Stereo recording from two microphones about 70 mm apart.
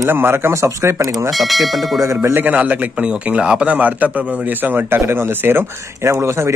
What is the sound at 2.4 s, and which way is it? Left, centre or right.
A man's voice, right.